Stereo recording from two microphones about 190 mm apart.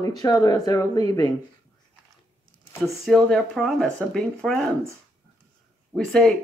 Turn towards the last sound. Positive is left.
turn(degrees=5)  # may be behind; listen again after turning